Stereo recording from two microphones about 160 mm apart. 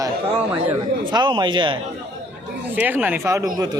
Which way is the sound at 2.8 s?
10° right (ahead or behind).